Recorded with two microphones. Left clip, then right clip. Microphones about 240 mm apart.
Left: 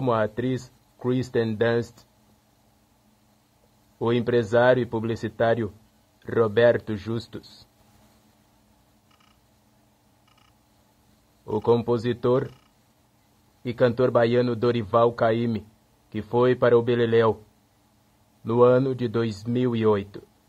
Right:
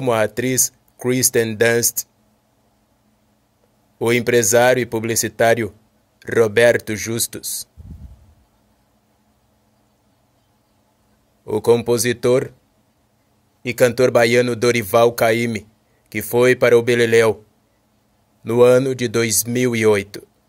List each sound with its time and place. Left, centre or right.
0.0 s speech: centre
4.0 s speech: centre
11.4 s speech: centre
13.7 s speech: right
18.5 s speech: right